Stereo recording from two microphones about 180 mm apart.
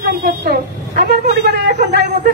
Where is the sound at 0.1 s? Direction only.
55° right (ahead or behind).